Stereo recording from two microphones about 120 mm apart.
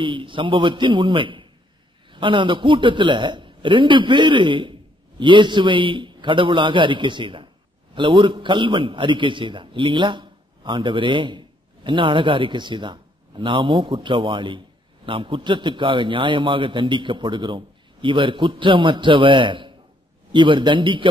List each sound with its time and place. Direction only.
0.0 s a man's voice: 45° right (ahead or behind)